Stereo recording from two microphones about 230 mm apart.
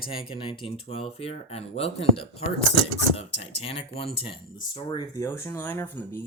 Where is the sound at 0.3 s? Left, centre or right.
Left.